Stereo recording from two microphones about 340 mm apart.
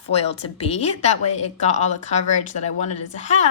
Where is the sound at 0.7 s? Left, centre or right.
Centre.